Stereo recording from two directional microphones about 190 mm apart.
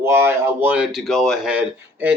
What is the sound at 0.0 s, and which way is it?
Speech, 15° right (ahead or behind).